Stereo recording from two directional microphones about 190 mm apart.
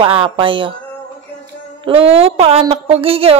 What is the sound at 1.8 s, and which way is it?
Speech, 30° right (ahead or behind).